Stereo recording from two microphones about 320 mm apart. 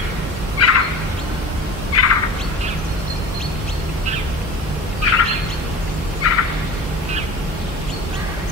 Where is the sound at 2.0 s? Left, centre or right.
Left.